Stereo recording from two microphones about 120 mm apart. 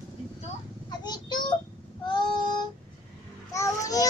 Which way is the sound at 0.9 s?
35° left (ahead or behind).